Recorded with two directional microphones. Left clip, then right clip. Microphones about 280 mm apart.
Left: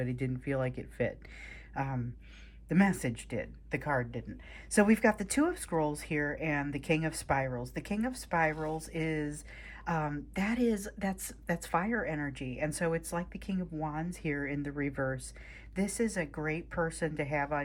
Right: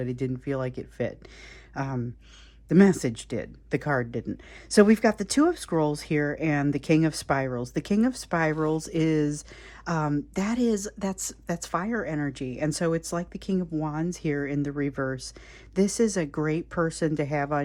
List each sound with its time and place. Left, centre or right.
0.0 s speech: centre